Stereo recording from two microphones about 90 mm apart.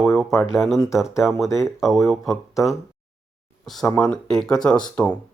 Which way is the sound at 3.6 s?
Centre (ahead or behind).